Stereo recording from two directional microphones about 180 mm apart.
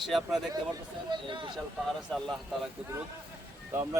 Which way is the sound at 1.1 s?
25° right (ahead or behind).